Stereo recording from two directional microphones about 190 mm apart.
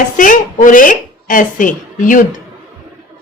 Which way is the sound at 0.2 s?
45° left (ahead or behind).